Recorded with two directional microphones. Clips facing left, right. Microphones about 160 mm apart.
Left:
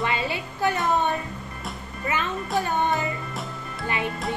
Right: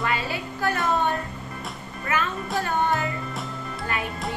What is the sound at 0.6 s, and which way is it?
Speech, 15° left (ahead or behind).